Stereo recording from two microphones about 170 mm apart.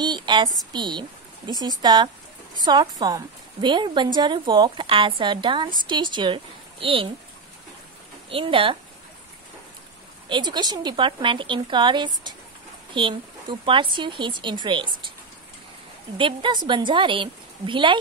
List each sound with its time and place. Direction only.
0.0 s a woman's voice: 25° right (ahead or behind)
8.3 s speech: 30° right (ahead or behind)
10.2 s speech: 25° right (ahead or behind)
16.2 s speech: 30° right (ahead or behind)